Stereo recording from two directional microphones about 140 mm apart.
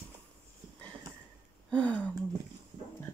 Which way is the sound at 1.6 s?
10° left (ahead or behind).